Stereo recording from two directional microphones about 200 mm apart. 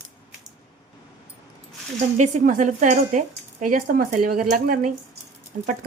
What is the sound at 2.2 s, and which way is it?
Speech, 40° right (ahead or behind).